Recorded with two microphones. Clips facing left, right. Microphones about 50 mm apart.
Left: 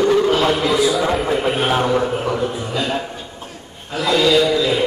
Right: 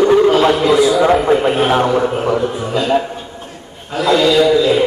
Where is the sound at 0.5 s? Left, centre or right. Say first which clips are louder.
Right 5 dB; centre.